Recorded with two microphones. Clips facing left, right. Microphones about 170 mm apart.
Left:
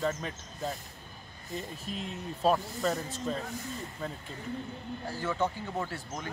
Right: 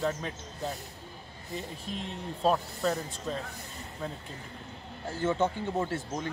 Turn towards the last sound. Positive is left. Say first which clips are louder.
# right 5 dB
turn(degrees=-25)  # may be behind; listen again after turning